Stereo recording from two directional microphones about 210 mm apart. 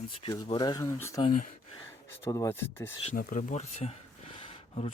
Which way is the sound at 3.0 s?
40° left (ahead or behind).